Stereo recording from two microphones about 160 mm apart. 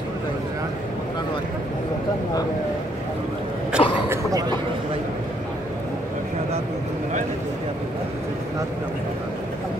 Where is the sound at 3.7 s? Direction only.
5° right (ahead or behind).